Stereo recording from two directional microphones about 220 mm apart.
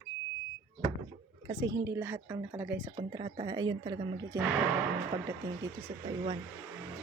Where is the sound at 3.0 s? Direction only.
20° right (ahead or behind).